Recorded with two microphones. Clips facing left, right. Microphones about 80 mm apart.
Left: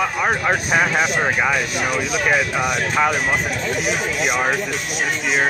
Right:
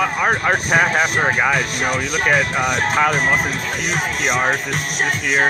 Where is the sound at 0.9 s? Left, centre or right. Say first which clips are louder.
Right 1 dB; centre.